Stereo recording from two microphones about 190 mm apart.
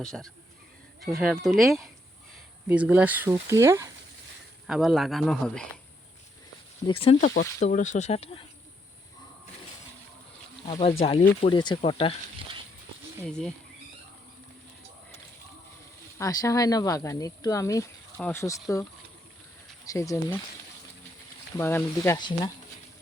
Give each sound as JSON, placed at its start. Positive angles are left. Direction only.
{"t": 0.0, "sound": "speech", "side_deg": 0}
{"t": 4.6, "sound": "speech", "side_deg": 0}
{"t": 6.8, "sound": "speech", "side_deg": 30}
{"t": 10.7, "sound": "speech", "side_deg": 30}
{"t": 13.2, "sound": "speech", "side_deg": 5}
{"t": 16.1, "sound": "speech", "side_deg": 20}
{"t": 19.8, "sound": "speech", "side_deg": 15}
{"t": 21.6, "sound": "speech", "side_deg": 10}